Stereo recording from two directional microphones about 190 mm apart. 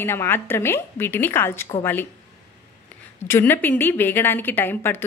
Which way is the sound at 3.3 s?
10° left (ahead or behind).